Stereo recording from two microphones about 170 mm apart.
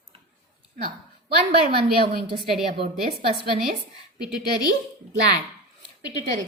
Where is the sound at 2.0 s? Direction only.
65° right (ahead or behind).